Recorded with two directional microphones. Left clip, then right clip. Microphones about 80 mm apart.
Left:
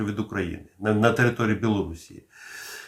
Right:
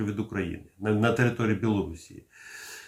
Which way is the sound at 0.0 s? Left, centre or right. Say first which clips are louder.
Left 3 dB; left.